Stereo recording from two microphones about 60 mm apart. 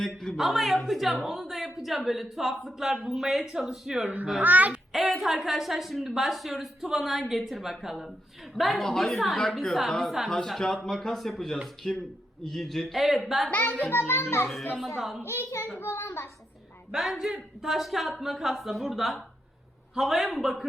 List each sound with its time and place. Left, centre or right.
0.0 s a man's voice: centre
0.3 s a woman's voice: centre
4.0 s a child's voice: right
4.7 s a woman's voice: centre
13.5 s a child's voice: left
14.4 s a woman's voice: centre
15.2 s a child's voice: left
17.0 s a woman's voice: centre